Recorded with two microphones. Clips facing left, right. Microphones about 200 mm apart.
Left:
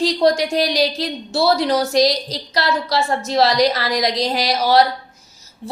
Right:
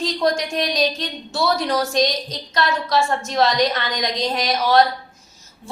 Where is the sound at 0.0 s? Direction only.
30° left (ahead or behind).